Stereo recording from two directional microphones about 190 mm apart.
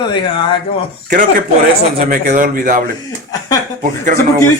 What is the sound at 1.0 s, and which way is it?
A man's voice, 45° right (ahead or behind).